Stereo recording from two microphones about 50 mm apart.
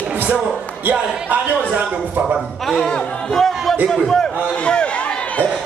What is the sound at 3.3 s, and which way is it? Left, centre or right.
Speech, centre.